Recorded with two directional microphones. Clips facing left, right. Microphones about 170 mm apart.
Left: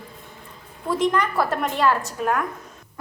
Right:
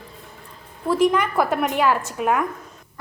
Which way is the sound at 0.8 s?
5° right (ahead or behind).